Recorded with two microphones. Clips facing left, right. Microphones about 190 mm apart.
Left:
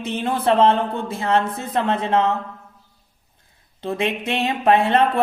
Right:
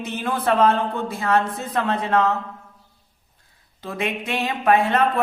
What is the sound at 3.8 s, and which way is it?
Speech, 25° left (ahead or behind).